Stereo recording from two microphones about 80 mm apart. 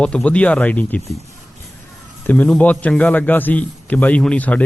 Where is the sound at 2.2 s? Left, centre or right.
Centre.